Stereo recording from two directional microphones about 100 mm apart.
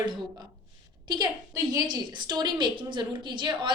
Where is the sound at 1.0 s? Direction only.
45° right (ahead or behind).